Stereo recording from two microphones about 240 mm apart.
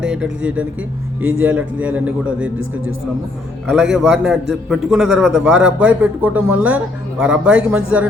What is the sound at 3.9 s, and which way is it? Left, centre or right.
Speech, centre.